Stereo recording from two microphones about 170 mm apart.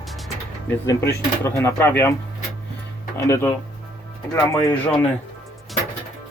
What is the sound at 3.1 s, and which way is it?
Speech, 15° left (ahead or behind).